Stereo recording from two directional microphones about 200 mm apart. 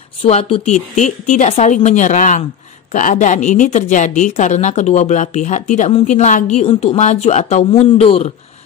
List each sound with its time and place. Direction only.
0.2 s a woman's voice: 30° left (ahead or behind)